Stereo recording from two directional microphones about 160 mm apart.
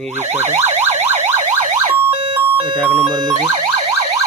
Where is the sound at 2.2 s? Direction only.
35° right (ahead or behind).